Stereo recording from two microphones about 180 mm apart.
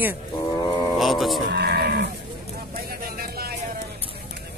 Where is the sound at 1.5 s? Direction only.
65° right (ahead or behind).